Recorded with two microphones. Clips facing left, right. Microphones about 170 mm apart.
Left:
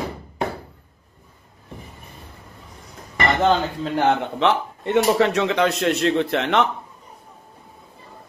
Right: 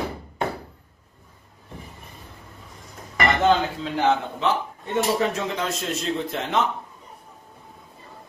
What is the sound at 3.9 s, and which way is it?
Speech, 60° left (ahead or behind).